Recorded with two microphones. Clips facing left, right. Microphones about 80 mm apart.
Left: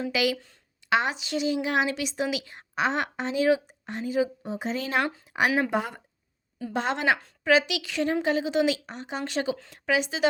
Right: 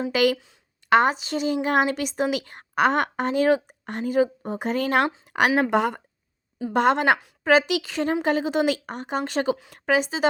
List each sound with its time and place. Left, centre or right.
0.1 s a woman's voice: right
6.7 s a woman's voice: right